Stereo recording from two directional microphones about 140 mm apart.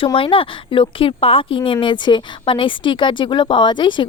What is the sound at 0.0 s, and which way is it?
Speech, 40° left (ahead or behind).